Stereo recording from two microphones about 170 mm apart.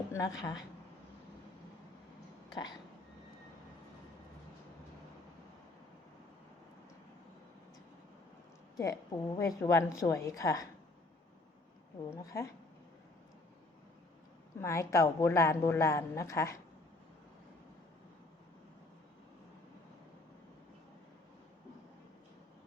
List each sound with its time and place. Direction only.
0.1 s a woman's voice: 20° left (ahead or behind)
2.5 s speech: 25° left (ahead or behind)
8.7 s a woman's voice: 20° left (ahead or behind)
12.1 s a woman's voice: 20° left (ahead or behind)
14.6 s a woman's voice: 15° left (ahead or behind)